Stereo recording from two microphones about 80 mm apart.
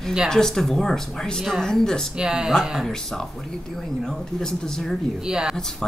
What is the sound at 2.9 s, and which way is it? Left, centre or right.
Speech, centre.